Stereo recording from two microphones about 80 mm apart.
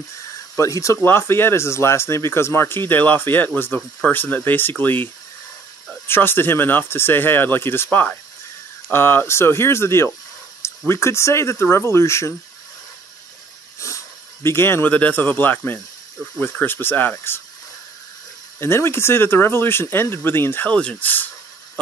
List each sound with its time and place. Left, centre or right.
0.6 s speech: left
1.0 s speech: left
13.7 s speech: left
18.6 s speech: left